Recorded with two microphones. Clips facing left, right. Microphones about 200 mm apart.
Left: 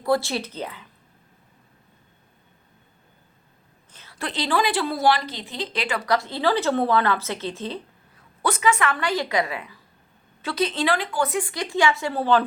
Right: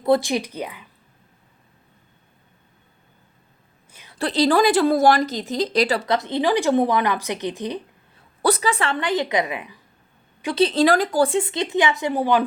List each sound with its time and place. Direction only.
0.0 s a woman's voice: 20° right (ahead or behind)
3.9 s a sound: 15° right (ahead or behind)
4.2 s a woman's voice: 35° right (ahead or behind)
6.1 s a woman's voice: 20° right (ahead or behind)
8.4 s a woman's voice: 35° right (ahead or behind); by 9.7 s 20° right (ahead or behind)
10.5 s speech: 35° right (ahead or behind)
11.3 s a woman's voice: 25° right (ahead or behind)